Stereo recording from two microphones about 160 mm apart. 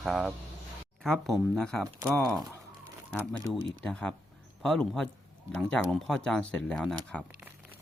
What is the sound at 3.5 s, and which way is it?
Speech, 5° left (ahead or behind).